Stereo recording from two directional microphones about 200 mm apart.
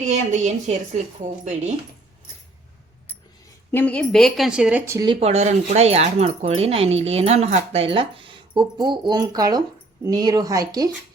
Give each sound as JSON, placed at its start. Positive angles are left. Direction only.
{"t": 0.1, "sound": "a woman's voice", "side_deg": -35}
{"t": 3.7, "sound": "speech", "side_deg": 10}
{"t": 5.2, "sound": "speech", "side_deg": -35}